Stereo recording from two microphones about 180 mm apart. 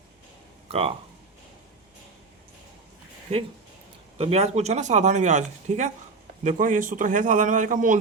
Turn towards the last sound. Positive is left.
turn(degrees=-45)  # may be behind; listen again after turning